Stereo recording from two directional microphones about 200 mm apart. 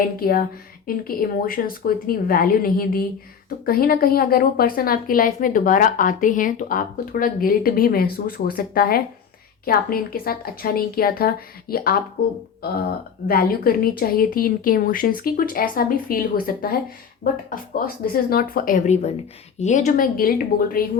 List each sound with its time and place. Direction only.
0.2 s a woman's voice: 45° left (ahead or behind)
13.2 s a woman's voice: 50° left (ahead or behind)